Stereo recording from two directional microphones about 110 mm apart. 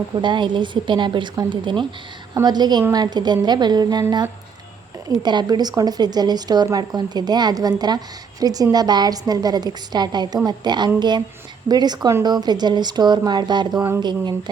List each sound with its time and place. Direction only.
0.2 s a woman's voice: 45° right (ahead or behind)
5.0 s a woman's voice: 30° right (ahead or behind)